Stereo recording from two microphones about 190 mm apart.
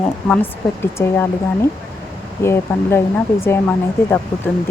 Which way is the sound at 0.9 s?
10° left (ahead or behind).